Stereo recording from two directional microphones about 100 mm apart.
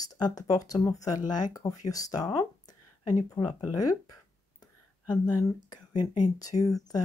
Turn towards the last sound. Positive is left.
turn(degrees=35)  # may be behind; listen again after turning